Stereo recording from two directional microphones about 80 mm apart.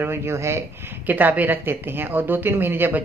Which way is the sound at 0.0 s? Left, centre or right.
Right.